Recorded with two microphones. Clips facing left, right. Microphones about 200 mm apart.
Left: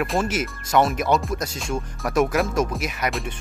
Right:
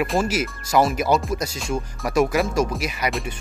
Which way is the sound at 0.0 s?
Centre (ahead or behind).